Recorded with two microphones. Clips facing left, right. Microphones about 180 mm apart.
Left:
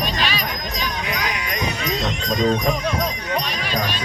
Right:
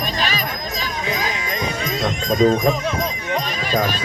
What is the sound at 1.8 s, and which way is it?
Music, 50° right (ahead or behind).